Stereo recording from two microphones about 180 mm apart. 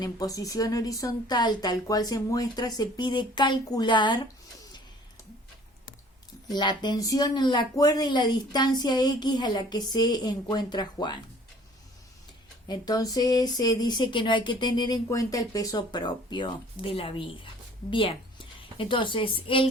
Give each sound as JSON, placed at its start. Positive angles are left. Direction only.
{"t": 0.0, "sound": "speech", "side_deg": 20}
{"t": 6.5, "sound": "speech", "side_deg": 25}
{"t": 12.6, "sound": "speech", "side_deg": 20}